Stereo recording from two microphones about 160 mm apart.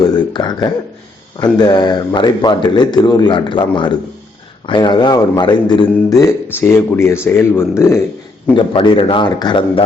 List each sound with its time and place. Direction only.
0.0 s a sound: 25° left (ahead or behind)
1.5 s a man's voice: 25° left (ahead or behind)
8.5 s speech: 30° left (ahead or behind)